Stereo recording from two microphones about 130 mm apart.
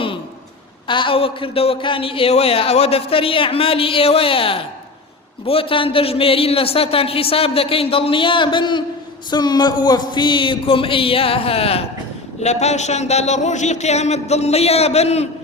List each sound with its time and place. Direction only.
0.9 s a man's voice: 40° left (ahead or behind)